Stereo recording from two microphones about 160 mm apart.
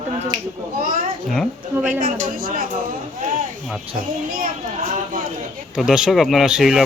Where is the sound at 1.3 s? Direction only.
Centre (ahead or behind).